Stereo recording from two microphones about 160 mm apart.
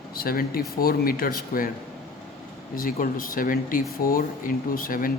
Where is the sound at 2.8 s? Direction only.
60° left (ahead or behind).